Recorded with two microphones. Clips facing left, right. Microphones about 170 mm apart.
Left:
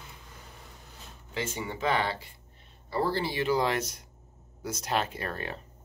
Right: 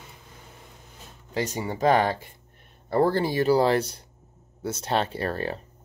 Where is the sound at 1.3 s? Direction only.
40° right (ahead or behind).